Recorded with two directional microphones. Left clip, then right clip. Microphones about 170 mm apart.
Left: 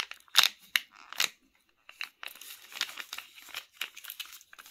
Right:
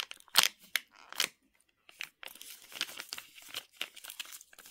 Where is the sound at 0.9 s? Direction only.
50° right (ahead or behind).